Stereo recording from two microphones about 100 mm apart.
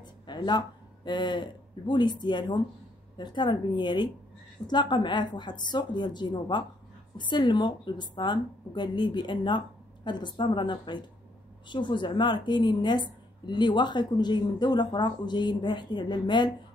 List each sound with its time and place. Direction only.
0.3 s a man's voice: 50° left (ahead or behind)